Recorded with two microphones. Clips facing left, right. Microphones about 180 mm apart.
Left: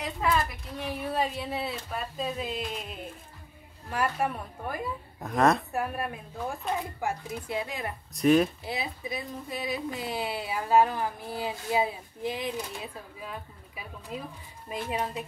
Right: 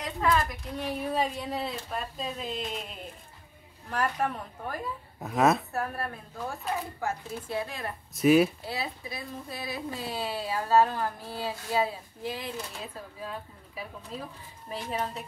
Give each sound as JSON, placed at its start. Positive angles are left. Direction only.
{"t": 0.0, "sound": "speech", "side_deg": 5}
{"t": 3.9, "sound": "speech", "side_deg": 10}
{"t": 5.2, "sound": "a woman's voice", "side_deg": -5}
{"t": 5.7, "sound": "speech", "side_deg": 15}
{"t": 8.1, "sound": "a woman's voice", "side_deg": -5}
{"t": 8.6, "sound": "speech", "side_deg": 20}